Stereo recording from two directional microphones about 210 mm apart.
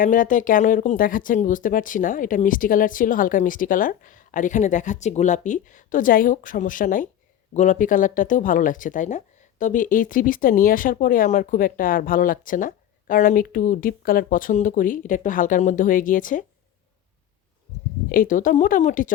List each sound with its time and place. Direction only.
0.0 s speech: 40° left (ahead or behind)
18.1 s speech: 40° left (ahead or behind)